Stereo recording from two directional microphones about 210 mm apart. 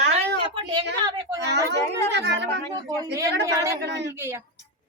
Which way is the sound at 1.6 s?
55° right (ahead or behind).